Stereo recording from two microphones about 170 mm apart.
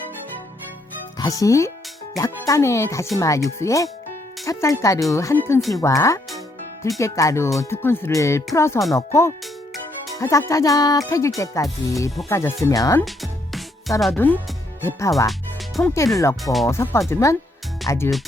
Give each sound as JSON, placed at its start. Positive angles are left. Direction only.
{"t": 1.2, "sound": "speech", "side_deg": 20}
{"t": 5.5, "sound": "speech", "side_deg": 0}
{"t": 5.8, "sound": "speech", "side_deg": 15}
{"t": 13.1, "sound": "music", "side_deg": 0}
{"t": 14.2, "sound": "speech", "side_deg": 10}
{"t": 15.3, "sound": "music", "side_deg": 0}
{"t": 16.4, "sound": "speech", "side_deg": 0}
{"t": 16.6, "sound": "speech", "side_deg": 15}